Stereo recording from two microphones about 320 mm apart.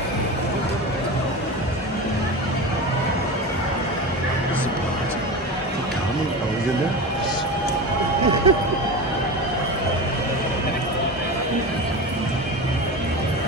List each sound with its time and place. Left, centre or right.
8.5 s speech: centre